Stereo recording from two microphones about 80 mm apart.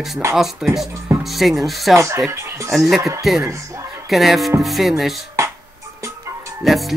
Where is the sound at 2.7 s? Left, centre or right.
Centre.